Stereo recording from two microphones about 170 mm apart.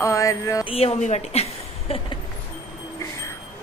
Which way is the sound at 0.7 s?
35° left (ahead or behind).